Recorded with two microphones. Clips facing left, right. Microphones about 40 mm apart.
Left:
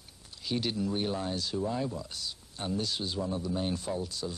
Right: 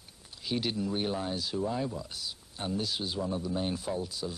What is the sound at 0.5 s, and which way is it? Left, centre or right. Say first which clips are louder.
Speech: even; centre.